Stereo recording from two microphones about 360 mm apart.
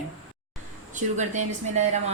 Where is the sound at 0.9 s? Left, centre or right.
Centre.